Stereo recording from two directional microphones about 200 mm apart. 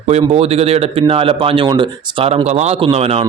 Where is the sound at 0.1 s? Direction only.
30° right (ahead or behind).